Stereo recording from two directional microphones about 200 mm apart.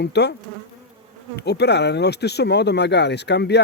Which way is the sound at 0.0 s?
55° left (ahead or behind).